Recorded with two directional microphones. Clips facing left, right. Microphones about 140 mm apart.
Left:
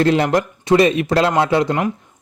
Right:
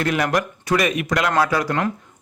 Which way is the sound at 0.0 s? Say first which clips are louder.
Left 5 dB; 25° left (ahead or behind).